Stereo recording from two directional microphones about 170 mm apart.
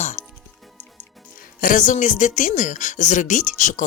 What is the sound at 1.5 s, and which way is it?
Speech, 50° left (ahead or behind).